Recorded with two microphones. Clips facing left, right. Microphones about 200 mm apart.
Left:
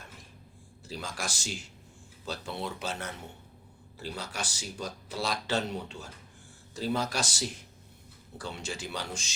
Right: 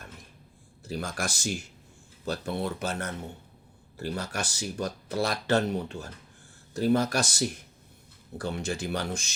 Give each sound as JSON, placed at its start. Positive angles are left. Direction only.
{"t": 0.9, "sound": "speech", "side_deg": -55}